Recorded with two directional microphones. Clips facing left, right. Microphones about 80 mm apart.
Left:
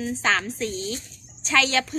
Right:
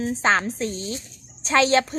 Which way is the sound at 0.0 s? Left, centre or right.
Right.